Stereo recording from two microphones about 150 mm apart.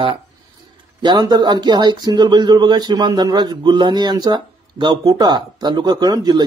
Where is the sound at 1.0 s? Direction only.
30° right (ahead or behind).